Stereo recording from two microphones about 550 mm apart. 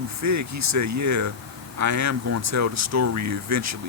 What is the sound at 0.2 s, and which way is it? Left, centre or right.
Speech, right.